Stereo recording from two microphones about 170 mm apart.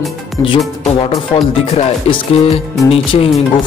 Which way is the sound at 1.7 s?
35° left (ahead or behind).